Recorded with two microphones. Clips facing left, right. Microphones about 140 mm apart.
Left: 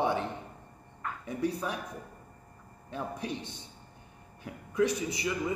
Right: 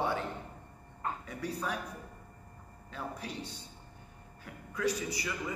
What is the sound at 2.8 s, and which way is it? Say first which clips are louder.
A man's voice: left 5 dB; 20° left (ahead or behind).